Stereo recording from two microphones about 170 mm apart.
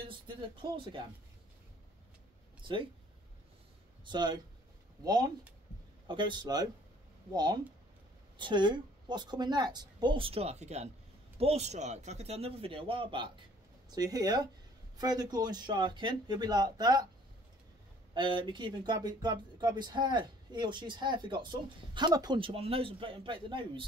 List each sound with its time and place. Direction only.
0.0 s speech: 30° right (ahead or behind)
2.6 s speech: 30° right (ahead or behind)
4.0 s a man's voice: 25° right (ahead or behind)
18.1 s speech: 30° right (ahead or behind)